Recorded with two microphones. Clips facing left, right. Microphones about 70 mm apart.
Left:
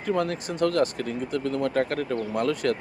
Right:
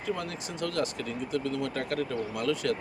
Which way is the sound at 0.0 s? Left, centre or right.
Left.